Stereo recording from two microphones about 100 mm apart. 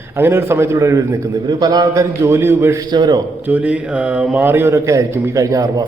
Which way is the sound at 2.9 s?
45° right (ahead or behind).